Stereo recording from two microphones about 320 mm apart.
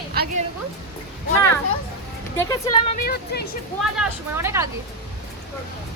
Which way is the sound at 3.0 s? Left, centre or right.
Left.